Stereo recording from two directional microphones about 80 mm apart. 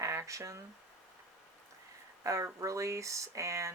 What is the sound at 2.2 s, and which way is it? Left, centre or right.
Speech, right.